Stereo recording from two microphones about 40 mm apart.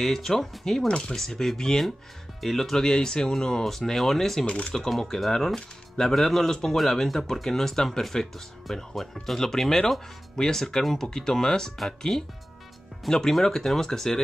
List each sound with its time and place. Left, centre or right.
0.0 s speech: centre
1.1 s speech: centre
4.5 s speech: left
4.7 s speech: centre